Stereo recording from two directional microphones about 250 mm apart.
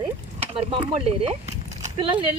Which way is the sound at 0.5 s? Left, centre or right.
Right.